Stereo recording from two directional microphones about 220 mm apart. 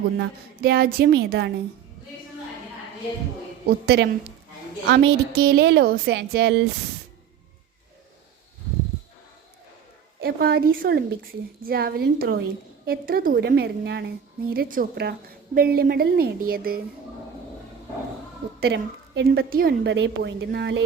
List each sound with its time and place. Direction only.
0.2 s a woman's voice: 45° right (ahead or behind)
3.7 s a woman's voice: 50° right (ahead or behind)
10.2 s a woman's voice: 45° right (ahead or behind)
18.6 s a woman's voice: 50° right (ahead or behind)